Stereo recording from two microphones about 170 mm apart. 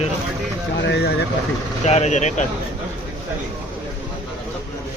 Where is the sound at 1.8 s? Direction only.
40° left (ahead or behind).